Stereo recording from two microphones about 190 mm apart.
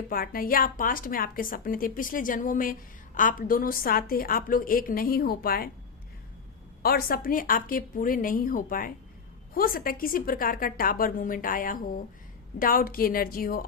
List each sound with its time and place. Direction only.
0.1 s a woman's voice: 50° left (ahead or behind)
6.8 s a woman's voice: 50° left (ahead or behind)